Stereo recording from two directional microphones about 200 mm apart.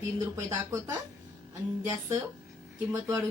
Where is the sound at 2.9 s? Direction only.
15° right (ahead or behind).